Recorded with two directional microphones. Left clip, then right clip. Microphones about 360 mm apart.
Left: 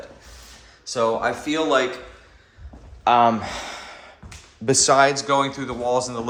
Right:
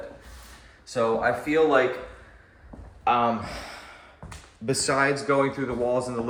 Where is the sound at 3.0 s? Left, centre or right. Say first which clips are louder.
Left 6 dB; left.